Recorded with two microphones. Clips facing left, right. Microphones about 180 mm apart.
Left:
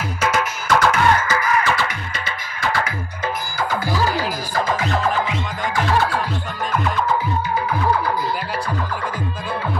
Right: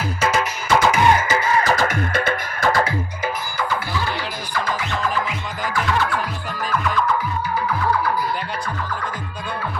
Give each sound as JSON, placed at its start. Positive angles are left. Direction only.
{"t": 0.2, "sound": "music", "side_deg": 0}
{"t": 0.9, "sound": "music", "side_deg": -15}
{"t": 3.9, "sound": "music", "side_deg": 40}
{"t": 5.7, "sound": "music", "side_deg": 35}